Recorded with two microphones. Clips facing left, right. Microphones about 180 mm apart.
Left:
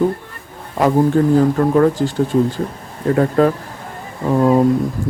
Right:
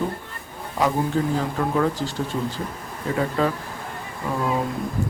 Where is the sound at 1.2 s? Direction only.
50° left (ahead or behind).